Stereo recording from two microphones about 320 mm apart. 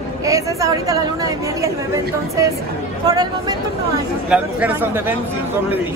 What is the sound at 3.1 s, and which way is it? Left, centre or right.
Speech, centre.